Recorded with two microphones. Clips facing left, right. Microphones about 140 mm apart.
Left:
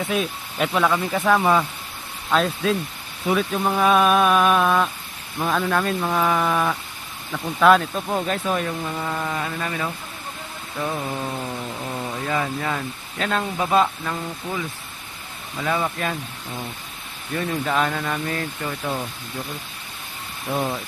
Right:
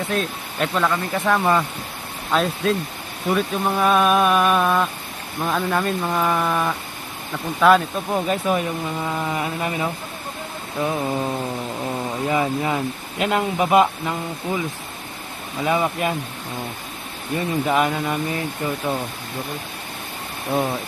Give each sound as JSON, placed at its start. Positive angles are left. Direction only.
{"t": 0.1, "sound": "a sound", "side_deg": 5}
{"t": 7.6, "sound": "speech", "side_deg": 0}
{"t": 11.0, "sound": "a sound", "side_deg": -20}
{"t": 12.2, "sound": "speech", "side_deg": -15}
{"t": 15.6, "sound": "speech", "side_deg": -15}
{"t": 17.3, "sound": "speech", "side_deg": -15}